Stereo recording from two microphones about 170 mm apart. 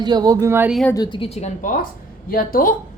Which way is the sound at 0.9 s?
25° left (ahead or behind).